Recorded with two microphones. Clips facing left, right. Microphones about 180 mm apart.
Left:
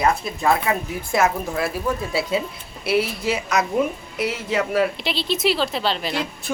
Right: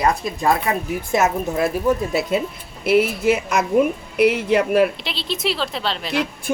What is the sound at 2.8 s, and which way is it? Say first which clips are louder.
Speech: right 5 dB; 50° right (ahead or behind).